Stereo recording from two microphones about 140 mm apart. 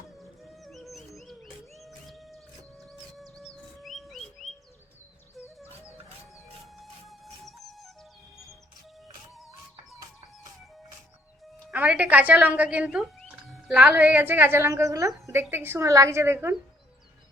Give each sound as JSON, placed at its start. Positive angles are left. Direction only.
{"t": 0.4, "sound": "a sound", "side_deg": 0}
{"t": 3.0, "sound": "chirp", "side_deg": 0}
{"t": 6.7, "sound": "music", "side_deg": 0}
{"t": 11.7, "sound": "a woman's voice", "side_deg": -10}